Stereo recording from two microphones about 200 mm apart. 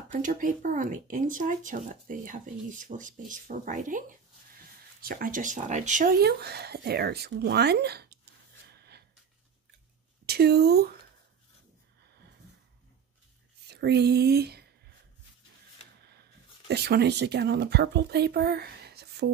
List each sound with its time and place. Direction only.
0.1 s speech: 40° right (ahead or behind)
6.2 s speech: 55° right (ahead or behind)
8.6 s a sound: 55° right (ahead or behind)
10.2 s speech: 55° right (ahead or behind)
13.7 s speech: 55° right (ahead or behind)
16.6 s speech: 55° right (ahead or behind)